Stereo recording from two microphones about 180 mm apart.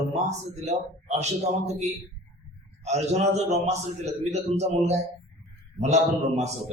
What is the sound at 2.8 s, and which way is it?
A man's voice, 35° right (ahead or behind).